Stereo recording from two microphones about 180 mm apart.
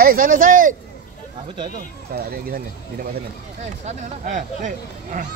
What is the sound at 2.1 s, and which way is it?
Speech, 55° right (ahead or behind).